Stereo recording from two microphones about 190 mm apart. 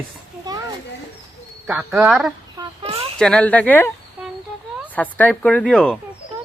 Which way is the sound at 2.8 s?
30° right (ahead or behind).